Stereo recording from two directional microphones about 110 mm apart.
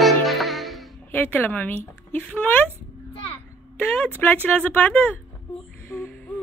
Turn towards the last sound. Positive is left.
turn(degrees=15)  # may be behind; listen again after turning